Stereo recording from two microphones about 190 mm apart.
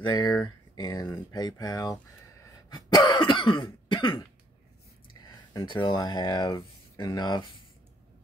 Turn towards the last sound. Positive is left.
turn(degrees=20)  # may be behind; listen again after turning